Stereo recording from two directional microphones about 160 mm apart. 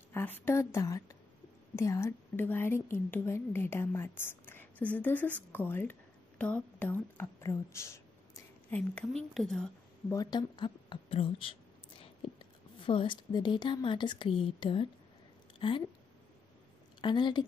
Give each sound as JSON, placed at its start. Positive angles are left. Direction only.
{"t": 0.1, "sound": "a woman's voice", "side_deg": 10}
{"t": 10.0, "sound": "a woman's voice", "side_deg": 20}
{"t": 17.0, "sound": "a woman's voice", "side_deg": 30}